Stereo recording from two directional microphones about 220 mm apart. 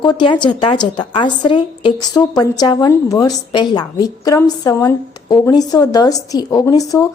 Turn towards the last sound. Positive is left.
turn(degrees=15)  # may be behind; listen again after turning